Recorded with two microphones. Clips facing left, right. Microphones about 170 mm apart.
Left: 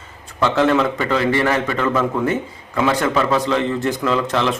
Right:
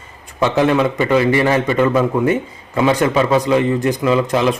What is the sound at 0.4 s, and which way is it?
A man's voice, 15° right (ahead or behind).